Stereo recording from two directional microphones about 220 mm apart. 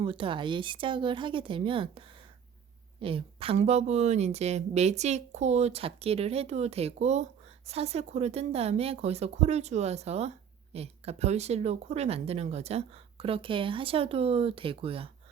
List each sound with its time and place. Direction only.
0.0 s speech: 25° right (ahead or behind)